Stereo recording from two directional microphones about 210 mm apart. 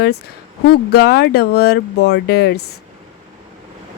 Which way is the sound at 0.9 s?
50° left (ahead or behind).